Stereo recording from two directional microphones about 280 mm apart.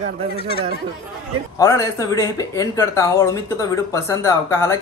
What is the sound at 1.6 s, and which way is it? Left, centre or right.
Speech, centre.